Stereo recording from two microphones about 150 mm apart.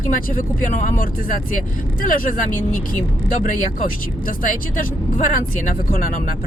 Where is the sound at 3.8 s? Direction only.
65° left (ahead or behind).